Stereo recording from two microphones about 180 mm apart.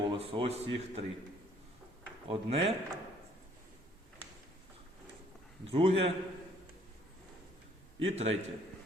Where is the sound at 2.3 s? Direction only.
35° right (ahead or behind).